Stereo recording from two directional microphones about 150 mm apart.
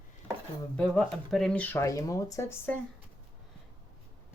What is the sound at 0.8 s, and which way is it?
Speech, centre (ahead or behind).